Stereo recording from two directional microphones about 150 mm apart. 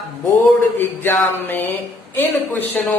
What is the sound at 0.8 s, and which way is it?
Speech, 15° left (ahead or behind).